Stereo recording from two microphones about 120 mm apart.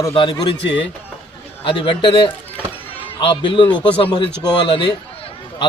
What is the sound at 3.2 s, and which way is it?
A man's voice, 45° left (ahead or behind).